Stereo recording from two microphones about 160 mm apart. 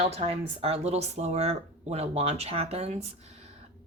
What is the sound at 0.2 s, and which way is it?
Speech, 40° right (ahead or behind).